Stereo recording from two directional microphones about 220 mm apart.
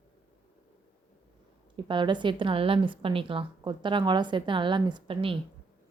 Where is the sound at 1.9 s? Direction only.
20° right (ahead or behind).